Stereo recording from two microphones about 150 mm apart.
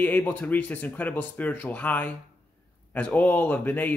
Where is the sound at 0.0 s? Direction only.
10° left (ahead or behind).